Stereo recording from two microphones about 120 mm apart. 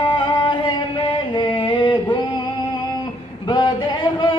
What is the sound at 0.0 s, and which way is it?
Music, 45° left (ahead or behind).